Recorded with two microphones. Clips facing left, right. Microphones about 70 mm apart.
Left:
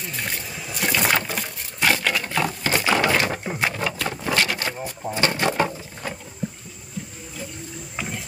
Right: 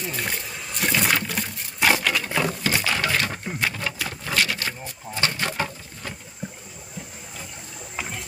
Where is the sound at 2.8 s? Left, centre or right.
Centre.